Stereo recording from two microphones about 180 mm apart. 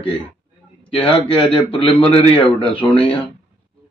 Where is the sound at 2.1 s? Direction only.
30° left (ahead or behind).